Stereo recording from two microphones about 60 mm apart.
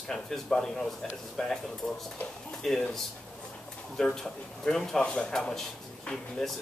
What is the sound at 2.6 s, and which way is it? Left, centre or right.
Speech, centre.